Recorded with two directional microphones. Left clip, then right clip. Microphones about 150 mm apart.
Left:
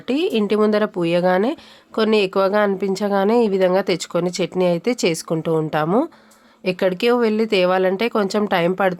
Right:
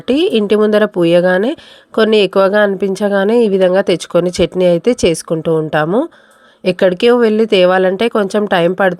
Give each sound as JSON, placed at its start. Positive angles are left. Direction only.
{"t": 0.1, "sound": "speech", "side_deg": -35}